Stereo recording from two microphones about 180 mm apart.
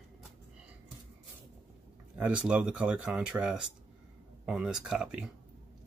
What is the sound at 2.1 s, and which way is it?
Speech, 5° right (ahead or behind).